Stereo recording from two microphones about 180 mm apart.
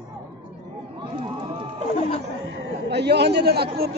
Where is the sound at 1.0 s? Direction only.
30° right (ahead or behind).